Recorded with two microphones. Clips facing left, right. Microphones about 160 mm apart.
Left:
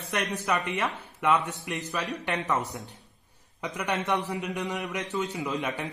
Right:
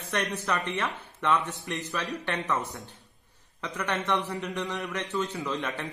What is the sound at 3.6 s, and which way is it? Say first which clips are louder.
A man's voice: left 1 dB; 15° left (ahead or behind).